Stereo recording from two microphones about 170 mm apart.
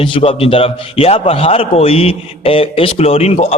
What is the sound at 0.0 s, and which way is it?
A man's voice, 30° left (ahead or behind).